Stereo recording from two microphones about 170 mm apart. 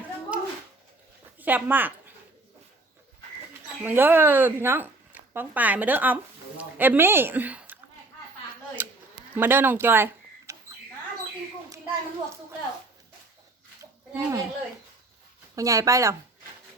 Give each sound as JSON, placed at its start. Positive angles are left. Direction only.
{"t": 0.3, "sound": "a sound", "side_deg": -10}
{"t": 1.4, "sound": "a woman's voice", "side_deg": -10}
{"t": 3.8, "sound": "speech", "side_deg": -10}
{"t": 8.8, "sound": "a sound", "side_deg": -10}
{"t": 9.3, "sound": "speech", "side_deg": -10}
{"t": 14.1, "sound": "speech", "side_deg": -15}
{"t": 15.5, "sound": "speech", "side_deg": -20}